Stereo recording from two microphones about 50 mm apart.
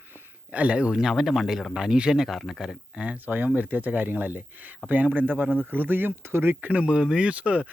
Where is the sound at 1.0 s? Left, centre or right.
Centre.